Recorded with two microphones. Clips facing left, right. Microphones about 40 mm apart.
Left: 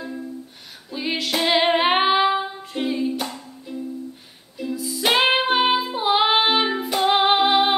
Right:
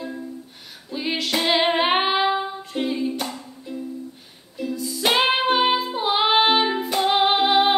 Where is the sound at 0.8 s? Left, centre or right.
Centre.